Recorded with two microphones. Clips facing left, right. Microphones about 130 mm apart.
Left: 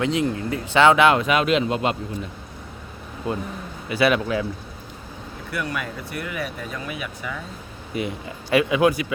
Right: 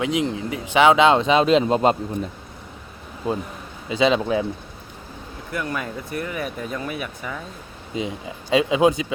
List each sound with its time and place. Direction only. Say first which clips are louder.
0.0 s speech: even; 15° right (ahead or behind); by 2.0 s 35° right (ahead or behind)
3.8 s speech: right 1 dB; 20° right (ahead or behind)
5.5 s speech: right 1 dB; 30° right (ahead or behind)
7.9 s speech: even; 20° right (ahead or behind)